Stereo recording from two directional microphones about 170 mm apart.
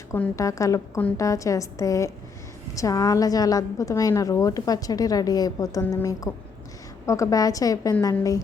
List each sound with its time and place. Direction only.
0.1 s a woman's voice: 15° left (ahead or behind)